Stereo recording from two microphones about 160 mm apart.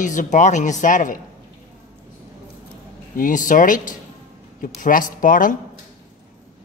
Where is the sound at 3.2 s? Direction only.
55° left (ahead or behind).